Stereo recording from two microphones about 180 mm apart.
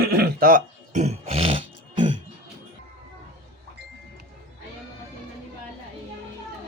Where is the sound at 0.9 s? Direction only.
40° right (ahead or behind).